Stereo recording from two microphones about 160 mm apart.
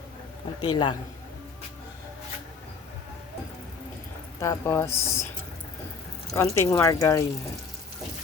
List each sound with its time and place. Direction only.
0.6 s speech: 30° left (ahead or behind)
4.4 s speech: 15° left (ahead or behind)
6.3 s speech: 20° left (ahead or behind)